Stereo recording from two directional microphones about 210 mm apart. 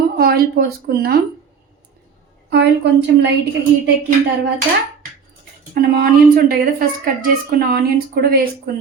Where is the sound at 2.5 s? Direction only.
55° right (ahead or behind).